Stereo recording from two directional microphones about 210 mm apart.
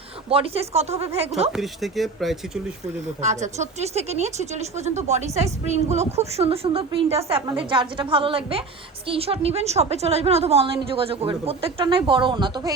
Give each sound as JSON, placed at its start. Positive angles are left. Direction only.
{"t": 0.3, "sound": "a woman's voice", "side_deg": -25}
{"t": 1.5, "sound": "speech", "side_deg": 0}
{"t": 3.2, "sound": "a woman's voice", "side_deg": -35}